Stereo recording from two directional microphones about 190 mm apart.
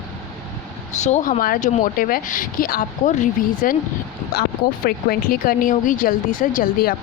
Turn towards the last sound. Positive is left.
turn(degrees=50)  # may be behind; listen again after turning